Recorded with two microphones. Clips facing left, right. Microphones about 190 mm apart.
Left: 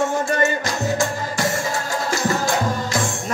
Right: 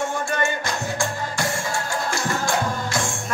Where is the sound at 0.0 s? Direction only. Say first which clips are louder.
Left 5 dB; 40° left (ahead or behind).